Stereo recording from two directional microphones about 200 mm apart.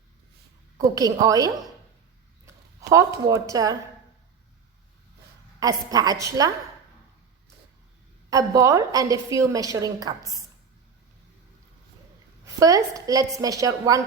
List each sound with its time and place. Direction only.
0.9 s a woman's voice: 15° right (ahead or behind)
5.5 s a woman's voice: 20° right (ahead or behind)
8.3 s a woman's voice: 15° right (ahead or behind)
12.5 s a woman's voice: 15° right (ahead or behind)